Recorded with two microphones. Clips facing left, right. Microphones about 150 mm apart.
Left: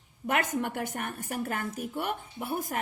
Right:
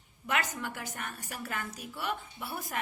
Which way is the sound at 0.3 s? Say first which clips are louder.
Left 5 dB; 50° left (ahead or behind).